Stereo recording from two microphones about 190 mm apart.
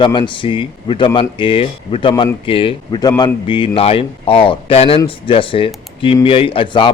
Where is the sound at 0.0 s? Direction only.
25° left (ahead or behind).